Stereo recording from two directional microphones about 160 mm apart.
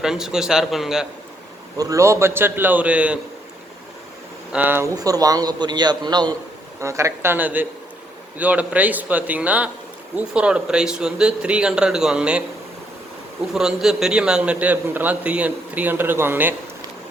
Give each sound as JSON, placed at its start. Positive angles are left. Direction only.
{"t": 0.0, "sound": "a man's voice", "side_deg": -5}
{"t": 1.8, "sound": "a man's voice", "side_deg": -20}
{"t": 4.5, "sound": "a man's voice", "side_deg": -10}
{"t": 13.5, "sound": "a man's voice", "side_deg": -5}